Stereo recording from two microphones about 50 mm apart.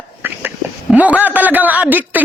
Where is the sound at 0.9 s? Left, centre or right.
Right.